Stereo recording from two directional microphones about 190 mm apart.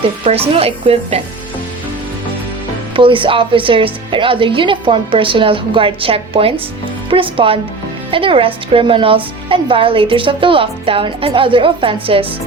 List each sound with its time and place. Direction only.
0.3 s speech: 30° right (ahead or behind)
2.9 s a woman's voice: 25° right (ahead or behind)